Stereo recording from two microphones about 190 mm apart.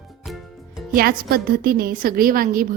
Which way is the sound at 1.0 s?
50° right (ahead or behind).